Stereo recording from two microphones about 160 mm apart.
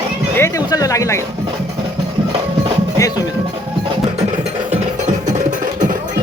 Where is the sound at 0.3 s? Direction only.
20° left (ahead or behind).